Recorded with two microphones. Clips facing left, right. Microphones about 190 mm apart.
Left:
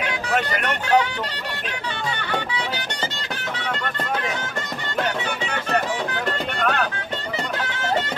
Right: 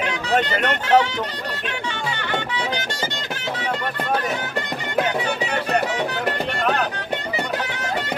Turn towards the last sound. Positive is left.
turn(degrees=-15)  # may be behind; listen again after turning